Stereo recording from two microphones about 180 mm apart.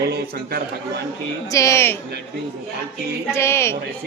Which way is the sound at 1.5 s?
15° left (ahead or behind).